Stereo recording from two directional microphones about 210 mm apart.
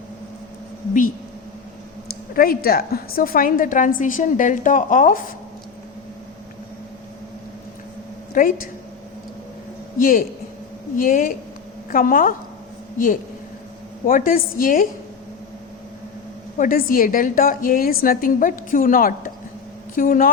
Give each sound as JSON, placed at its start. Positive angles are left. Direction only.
{"t": 2.3, "sound": "a woman's voice", "side_deg": 45}
{"t": 8.3, "sound": "a woman's voice", "side_deg": 40}
{"t": 10.0, "sound": "a woman's voice", "side_deg": 40}
{"t": 14.1, "sound": "a woman's voice", "side_deg": 40}
{"t": 16.6, "sound": "a woman's voice", "side_deg": 40}